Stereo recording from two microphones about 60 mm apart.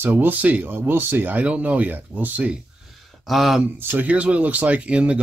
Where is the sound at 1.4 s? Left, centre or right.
Right.